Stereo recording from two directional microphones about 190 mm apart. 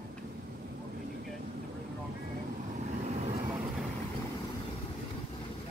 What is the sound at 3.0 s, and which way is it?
Vehicle, 35° right (ahead or behind).